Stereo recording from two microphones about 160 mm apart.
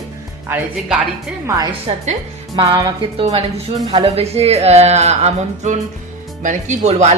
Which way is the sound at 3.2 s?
40° right (ahead or behind).